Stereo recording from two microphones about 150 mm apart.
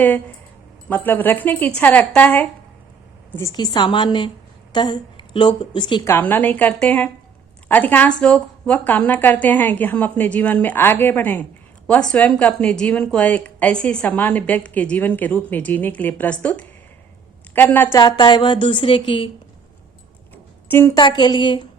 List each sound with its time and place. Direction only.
0.9 s a woman's voice: 15° left (ahead or behind)
3.3 s a woman's voice: 25° left (ahead or behind)
6.1 s a woman's voice: 15° left (ahead or behind)
17.9 s a woman's voice: 30° left (ahead or behind)
20.3 s a sound: 15° left (ahead or behind)
20.9 s a woman's voice: 30° left (ahead or behind)